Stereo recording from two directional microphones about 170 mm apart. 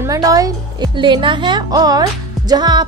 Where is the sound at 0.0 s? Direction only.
20° right (ahead or behind).